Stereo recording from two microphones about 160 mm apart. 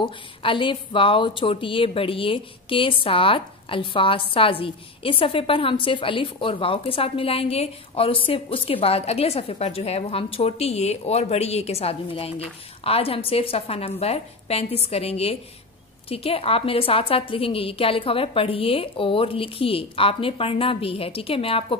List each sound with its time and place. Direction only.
0.0 s a woman's voice: 30° left (ahead or behind)